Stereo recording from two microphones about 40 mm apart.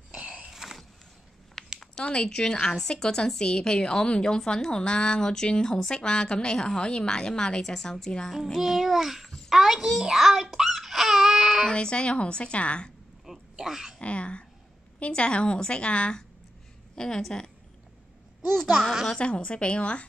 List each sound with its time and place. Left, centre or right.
0.1 s a sound: right
0.5 s a sound: centre
1.6 s a sound: centre
2.2 s a woman's voice: centre
8.3 s child singing: centre
9.5 s a child's voice: centre
9.9 s babbling: centre
11.7 s a woman's voice: left
13.6 s speech: centre
13.9 s a woman's voice: left; by 17.2 s centre
18.6 s child singing: centre
19.1 s a woman's voice: left